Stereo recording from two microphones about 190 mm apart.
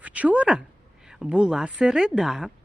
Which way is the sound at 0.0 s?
5° right (ahead or behind).